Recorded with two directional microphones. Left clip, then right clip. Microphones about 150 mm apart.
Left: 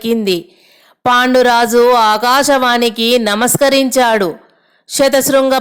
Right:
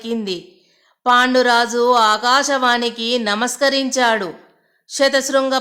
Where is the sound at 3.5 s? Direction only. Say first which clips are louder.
Left 7 dB; 40° left (ahead or behind).